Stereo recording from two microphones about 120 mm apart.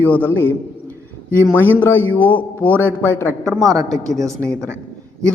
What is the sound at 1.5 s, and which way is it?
A man's voice, 15° left (ahead or behind).